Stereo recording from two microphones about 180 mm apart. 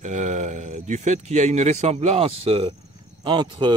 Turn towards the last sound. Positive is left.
turn(degrees=-25)  # may be behind; listen again after turning